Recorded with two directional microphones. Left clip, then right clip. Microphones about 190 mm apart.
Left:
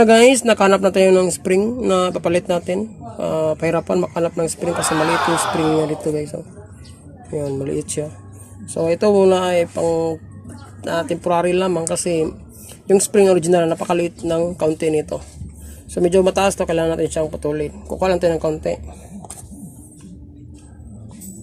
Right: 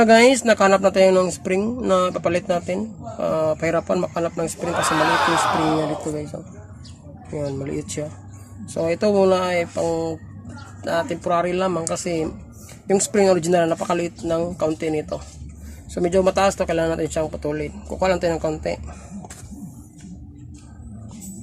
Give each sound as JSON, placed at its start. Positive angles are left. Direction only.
{"t": 0.0, "sound": "speech", "side_deg": 15}
{"t": 4.7, "sound": "speech", "side_deg": 0}
{"t": 5.9, "sound": "speech", "side_deg": 25}
{"t": 7.3, "sound": "speech", "side_deg": 15}